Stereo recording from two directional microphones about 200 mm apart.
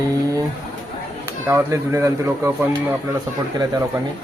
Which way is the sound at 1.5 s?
10° right (ahead or behind).